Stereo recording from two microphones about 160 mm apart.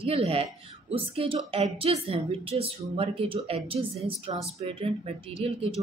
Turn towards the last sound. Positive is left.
turn(degrees=-40)  # may be behind; listen again after turning